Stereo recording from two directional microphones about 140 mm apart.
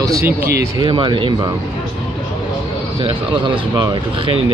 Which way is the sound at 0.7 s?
35° right (ahead or behind).